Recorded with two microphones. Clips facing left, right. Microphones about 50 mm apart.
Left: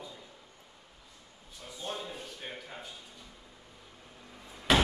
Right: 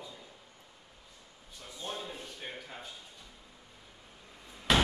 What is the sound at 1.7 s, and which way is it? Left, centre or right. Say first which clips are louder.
Speech: left 1 dB; centre.